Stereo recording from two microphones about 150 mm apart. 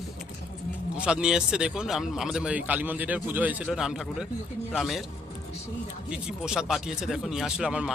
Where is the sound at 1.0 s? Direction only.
5° right (ahead or behind).